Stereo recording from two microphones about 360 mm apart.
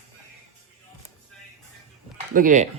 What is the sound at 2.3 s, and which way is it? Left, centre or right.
Speech, right.